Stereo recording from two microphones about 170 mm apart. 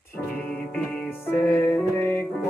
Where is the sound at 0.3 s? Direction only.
10° left (ahead or behind).